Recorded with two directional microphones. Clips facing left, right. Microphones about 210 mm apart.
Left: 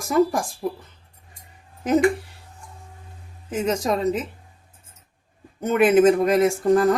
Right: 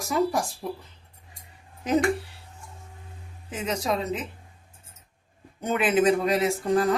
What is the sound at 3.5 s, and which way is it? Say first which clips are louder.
Speech: left 5 dB; 45° left (ahead or behind).